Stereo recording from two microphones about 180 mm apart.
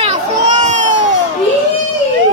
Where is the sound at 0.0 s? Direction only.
40° right (ahead or behind).